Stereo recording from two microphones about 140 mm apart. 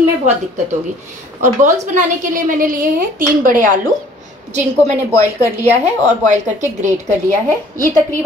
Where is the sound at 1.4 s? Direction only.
60° right (ahead or behind).